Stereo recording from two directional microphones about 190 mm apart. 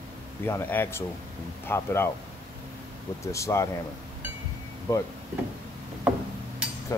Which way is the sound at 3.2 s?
15° left (ahead or behind).